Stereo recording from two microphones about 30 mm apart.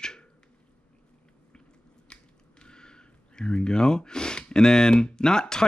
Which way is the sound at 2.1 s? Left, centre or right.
Left.